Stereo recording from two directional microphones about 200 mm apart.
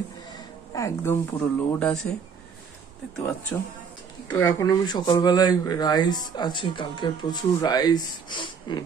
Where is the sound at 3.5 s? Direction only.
Centre (ahead or behind); by 8.8 s 25° left (ahead or behind).